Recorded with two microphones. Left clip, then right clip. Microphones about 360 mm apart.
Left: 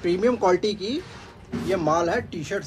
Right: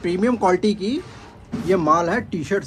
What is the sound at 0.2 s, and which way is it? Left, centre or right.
A man's voice, centre.